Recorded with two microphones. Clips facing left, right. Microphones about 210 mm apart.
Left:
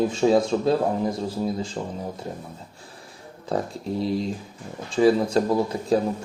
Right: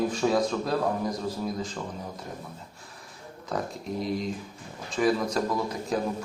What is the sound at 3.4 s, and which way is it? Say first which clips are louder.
Speech: left 5 dB; 30° left (ahead or behind).